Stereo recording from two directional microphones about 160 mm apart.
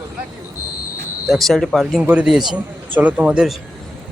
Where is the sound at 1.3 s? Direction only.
Centre (ahead or behind).